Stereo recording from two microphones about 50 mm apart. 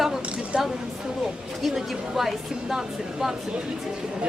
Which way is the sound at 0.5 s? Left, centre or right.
Right.